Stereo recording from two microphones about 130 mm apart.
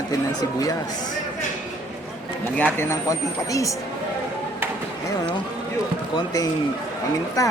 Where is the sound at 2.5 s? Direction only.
15° left (ahead or behind).